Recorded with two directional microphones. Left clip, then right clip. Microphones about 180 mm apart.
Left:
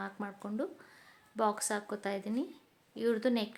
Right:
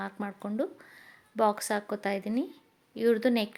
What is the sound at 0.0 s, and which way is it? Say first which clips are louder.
Speech: right 4 dB; 20° right (ahead or behind).